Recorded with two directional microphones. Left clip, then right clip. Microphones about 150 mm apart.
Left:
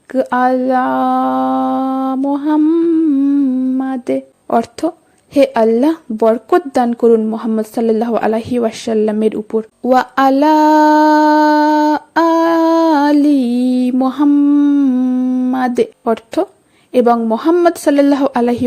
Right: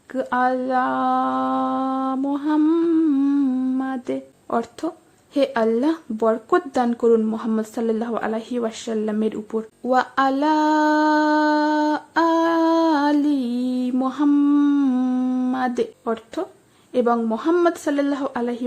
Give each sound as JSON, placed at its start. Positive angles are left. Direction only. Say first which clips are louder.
{"t": 0.1, "sound": "mantra", "louder": "left 7 dB", "side_deg": 40}
{"t": 2.6, "sound": "humming", "louder": "left 5 dB", "side_deg": 25}
{"t": 3.8, "sound": "speech", "louder": "left 8 dB", "side_deg": 40}
{"t": 7.3, "sound": "a sound", "louder": "left 7 dB", "side_deg": 40}
{"t": 14.3, "sound": "humming", "louder": "left 6 dB", "side_deg": 25}
{"t": 15.5, "sound": "speech", "louder": "left 8 dB", "side_deg": 45}